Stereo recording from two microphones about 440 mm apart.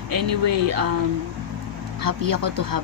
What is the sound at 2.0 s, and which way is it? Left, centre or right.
Speech, right.